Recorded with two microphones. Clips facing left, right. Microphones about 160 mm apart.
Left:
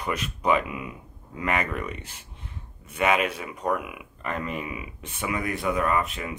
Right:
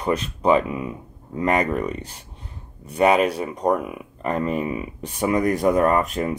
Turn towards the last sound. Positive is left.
turn(degrees=-45)  # may be behind; listen again after turning